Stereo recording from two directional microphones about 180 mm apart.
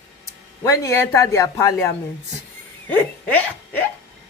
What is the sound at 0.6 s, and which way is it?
Speech, 15° left (ahead or behind).